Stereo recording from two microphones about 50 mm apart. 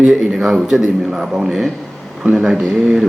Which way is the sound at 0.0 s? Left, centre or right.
Centre.